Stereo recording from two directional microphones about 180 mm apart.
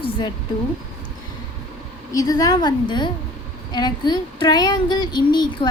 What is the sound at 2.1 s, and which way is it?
Speech, 20° left (ahead or behind).